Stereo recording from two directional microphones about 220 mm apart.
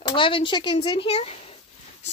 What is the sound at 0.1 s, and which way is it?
A woman's voice, 25° left (ahead or behind).